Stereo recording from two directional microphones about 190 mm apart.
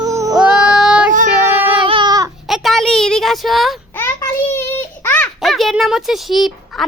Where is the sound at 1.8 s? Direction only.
25° right (ahead or behind).